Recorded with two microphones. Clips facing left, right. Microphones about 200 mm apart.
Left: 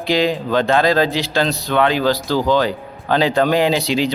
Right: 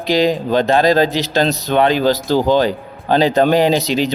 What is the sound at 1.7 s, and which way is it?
Speech, 20° right (ahead or behind).